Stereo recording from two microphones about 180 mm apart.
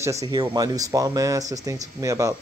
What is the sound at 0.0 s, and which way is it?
A man's voice, 20° right (ahead or behind).